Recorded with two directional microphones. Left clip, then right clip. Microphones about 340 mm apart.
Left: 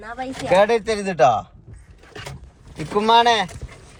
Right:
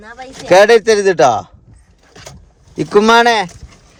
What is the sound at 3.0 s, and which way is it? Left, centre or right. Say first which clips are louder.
Speech: right 6 dB; right.